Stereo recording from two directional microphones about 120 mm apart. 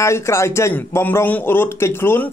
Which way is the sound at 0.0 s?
25° left (ahead or behind).